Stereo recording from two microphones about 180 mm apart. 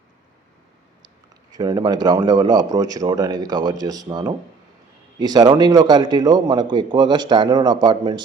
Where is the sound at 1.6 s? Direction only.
20° right (ahead or behind).